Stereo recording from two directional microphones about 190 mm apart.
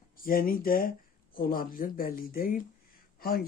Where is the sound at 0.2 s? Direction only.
50° left (ahead or behind).